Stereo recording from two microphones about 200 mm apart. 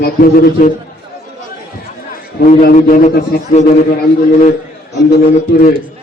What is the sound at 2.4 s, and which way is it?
A man's voice, 40° left (ahead or behind).